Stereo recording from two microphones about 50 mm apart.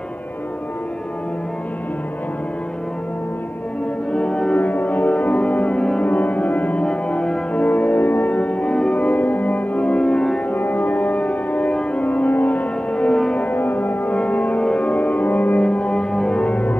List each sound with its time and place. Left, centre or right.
4.1 s music: centre
4.6 s music: left
6.8 s music: centre
7.6 s music: left
10.5 s music: left
12.9 s music: centre
13.5 s music: left
15.6 s music: left